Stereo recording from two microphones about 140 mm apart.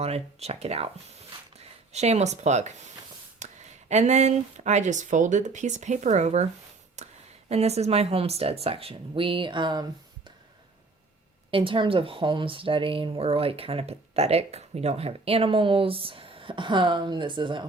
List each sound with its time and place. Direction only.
0.0 s speech: 50° right (ahead or behind)
7.5 s speech: 50° right (ahead or behind); by 9.8 s 30° right (ahead or behind)
11.5 s speech: 40° right (ahead or behind)